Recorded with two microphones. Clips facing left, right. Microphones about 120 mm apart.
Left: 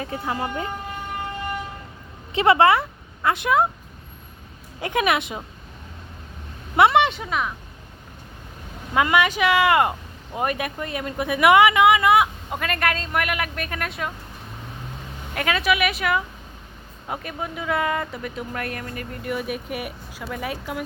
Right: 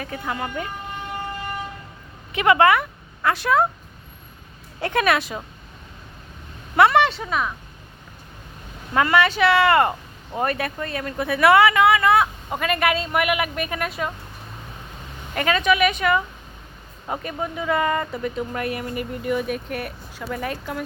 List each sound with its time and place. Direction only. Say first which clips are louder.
0.0 s speech: left 1 dB; 30° left (ahead or behind)
2.3 s speech: even; 30° left (ahead or behind)
4.8 s speech: right 1 dB; 15° left (ahead or behind)
6.7 s speech: even; 20° left (ahead or behind)
8.9 s speech: right 1 dB; 10° left (ahead or behind)
12.5 s speech: right 3 dB; centre (ahead or behind)
15.4 s speech: right 3 dB; 5° left (ahead or behind)
19.3 s speech: right 2 dB; 5° left (ahead or behind)